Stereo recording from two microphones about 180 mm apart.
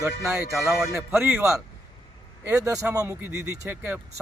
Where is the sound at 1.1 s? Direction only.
15° right (ahead or behind).